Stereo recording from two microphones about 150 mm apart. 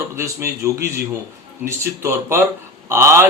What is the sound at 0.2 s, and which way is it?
Speech, 20° right (ahead or behind).